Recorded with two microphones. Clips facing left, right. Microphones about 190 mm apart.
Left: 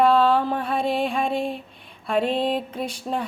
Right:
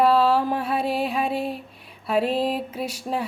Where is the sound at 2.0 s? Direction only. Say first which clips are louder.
Even; 5° right (ahead or behind).